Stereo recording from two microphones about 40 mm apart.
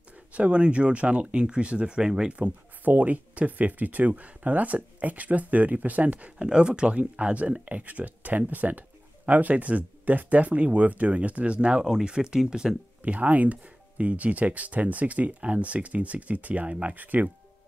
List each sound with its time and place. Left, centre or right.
0.3 s speech: right
2.3 s speech: right
6.3 s speech: right
11.8 s speech: centre
13.0 s speech: right